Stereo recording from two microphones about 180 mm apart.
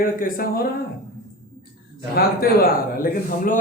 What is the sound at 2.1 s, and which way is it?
Speech, 55° left (ahead or behind).